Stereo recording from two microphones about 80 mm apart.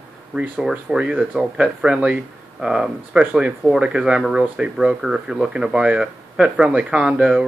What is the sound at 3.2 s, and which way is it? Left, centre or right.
Speech, right.